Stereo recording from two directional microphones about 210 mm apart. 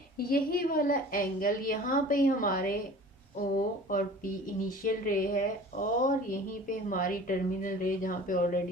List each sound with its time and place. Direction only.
0.3 s a woman's voice: 45° left (ahead or behind)